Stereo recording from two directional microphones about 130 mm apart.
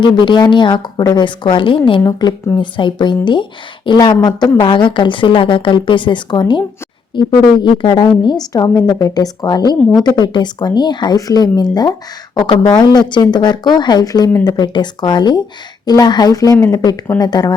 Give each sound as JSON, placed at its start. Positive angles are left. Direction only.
{"t": 0.0, "sound": "speech", "side_deg": 35}